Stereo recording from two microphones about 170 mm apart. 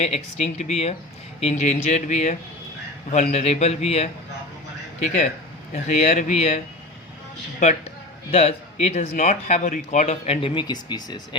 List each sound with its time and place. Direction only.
0.0 s speech: 40° left (ahead or behind)
8.3 s speech: 40° left (ahead or behind)